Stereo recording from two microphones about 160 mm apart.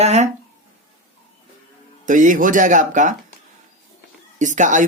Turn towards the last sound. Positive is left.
turn(degrees=-50)  # may be behind; listen again after turning